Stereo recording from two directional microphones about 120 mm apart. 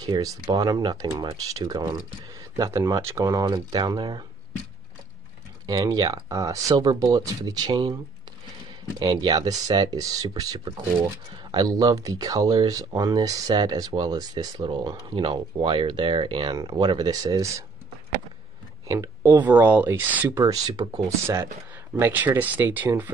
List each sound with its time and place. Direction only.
0.0 s speech: 30° right (ahead or behind)
5.7 s speech: 35° right (ahead or behind)
9.0 s speech: 35° right (ahead or behind)
14.6 s speech: 45° right (ahead or behind); by 17.6 s 30° right (ahead or behind)
18.9 s speech: 25° right (ahead or behind)
20.3 s speech: 35° right (ahead or behind)
21.9 s speech: 15° right (ahead or behind)